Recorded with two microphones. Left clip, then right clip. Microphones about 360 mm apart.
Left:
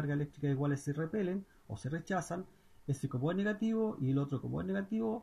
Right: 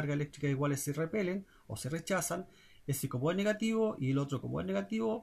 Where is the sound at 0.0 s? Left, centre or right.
Right.